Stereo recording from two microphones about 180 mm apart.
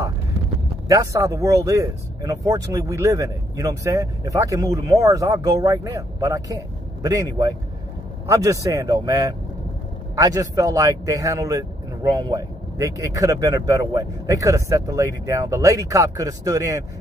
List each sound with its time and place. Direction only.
0.8 s speech: 20° right (ahead or behind)